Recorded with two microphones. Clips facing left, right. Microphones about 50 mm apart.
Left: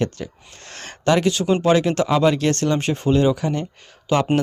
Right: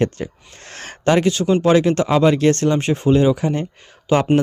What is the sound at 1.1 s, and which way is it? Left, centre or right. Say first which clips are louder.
Speech: right 2 dB; centre.